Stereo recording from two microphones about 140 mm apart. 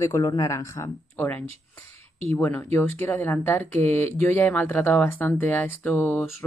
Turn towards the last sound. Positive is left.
turn(degrees=15)  # may be behind; listen again after turning